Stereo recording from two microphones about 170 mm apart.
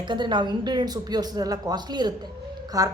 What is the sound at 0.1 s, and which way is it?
A woman's voice, 25° right (ahead or behind).